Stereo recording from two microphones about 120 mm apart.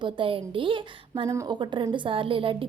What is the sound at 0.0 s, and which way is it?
A woman's voice, 45° right (ahead or behind).